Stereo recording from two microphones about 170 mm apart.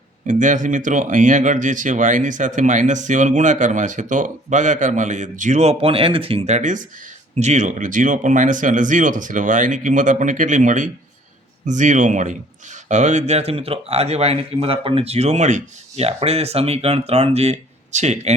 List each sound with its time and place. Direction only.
0.3 s speech: 50° right (ahead or behind)